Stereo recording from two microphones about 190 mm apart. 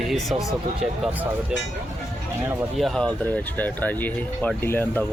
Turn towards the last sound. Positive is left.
turn(degrees=10)  # may be behind; listen again after turning